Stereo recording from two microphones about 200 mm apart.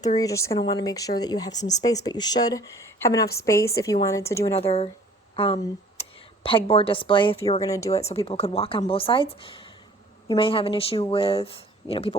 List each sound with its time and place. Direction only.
0.2 s speech: 15° left (ahead or behind)
4.5 s a woman's voice: 30° left (ahead or behind)
7.6 s speech: 15° left (ahead or behind)
8.0 s speech: 30° left (ahead or behind)